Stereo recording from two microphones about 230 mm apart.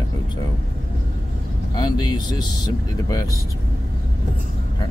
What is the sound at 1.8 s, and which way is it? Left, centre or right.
Speech, centre.